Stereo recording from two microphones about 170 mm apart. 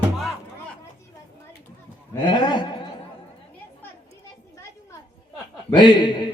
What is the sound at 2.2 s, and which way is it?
Speech, 25° left (ahead or behind).